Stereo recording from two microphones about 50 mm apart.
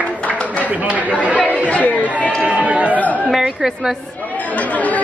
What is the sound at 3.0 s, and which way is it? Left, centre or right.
Speech, left.